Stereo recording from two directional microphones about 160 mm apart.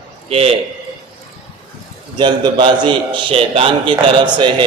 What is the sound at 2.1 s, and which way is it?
A man's voice, 30° right (ahead or behind).